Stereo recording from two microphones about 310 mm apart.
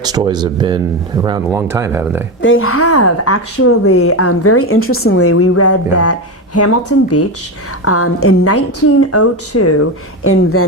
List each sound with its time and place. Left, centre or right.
0.0 s speech: centre
2.4 s a woman's voice: left